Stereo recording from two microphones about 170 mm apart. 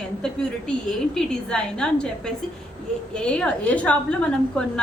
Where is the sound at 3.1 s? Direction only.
5° left (ahead or behind).